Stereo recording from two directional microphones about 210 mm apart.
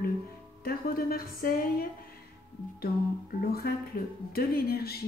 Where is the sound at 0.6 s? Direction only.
45° left (ahead or behind).